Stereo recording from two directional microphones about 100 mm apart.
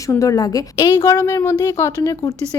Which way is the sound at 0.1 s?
35° left (ahead or behind).